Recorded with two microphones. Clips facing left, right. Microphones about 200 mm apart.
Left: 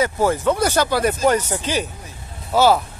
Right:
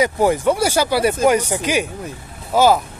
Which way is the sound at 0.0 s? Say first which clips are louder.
Right 2 dB; 15° right (ahead or behind).